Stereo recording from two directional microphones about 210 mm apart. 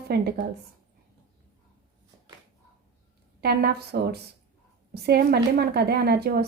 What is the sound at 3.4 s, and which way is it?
A woman's voice, 50° right (ahead or behind).